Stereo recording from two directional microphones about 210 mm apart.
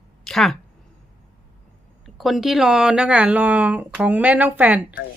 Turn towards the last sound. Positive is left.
turn(degrees=-5)  # may be behind; listen again after turning